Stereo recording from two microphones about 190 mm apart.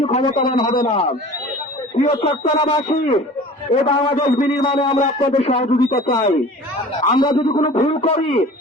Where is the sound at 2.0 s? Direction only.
30° left (ahead or behind).